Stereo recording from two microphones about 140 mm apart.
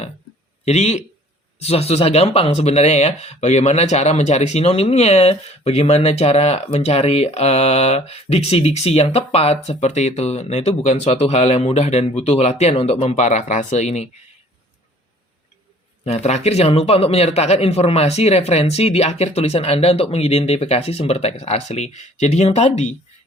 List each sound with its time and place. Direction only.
0.6 s speech: 55° left (ahead or behind)
16.0 s speech: 55° left (ahead or behind)